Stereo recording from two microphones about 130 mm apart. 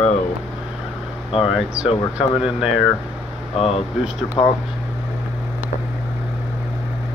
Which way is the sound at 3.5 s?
50° left (ahead or behind).